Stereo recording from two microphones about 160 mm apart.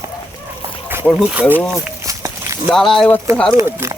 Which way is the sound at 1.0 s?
5° right (ahead or behind).